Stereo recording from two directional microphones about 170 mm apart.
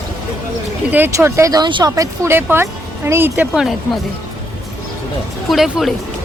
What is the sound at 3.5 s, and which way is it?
Speech, centre (ahead or behind).